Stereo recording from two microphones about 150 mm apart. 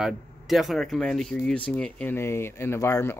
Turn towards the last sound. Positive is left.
turn(degrees=20)  # may be behind; listen again after turning